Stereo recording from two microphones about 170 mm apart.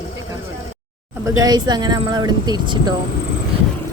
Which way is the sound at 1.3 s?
25° right (ahead or behind).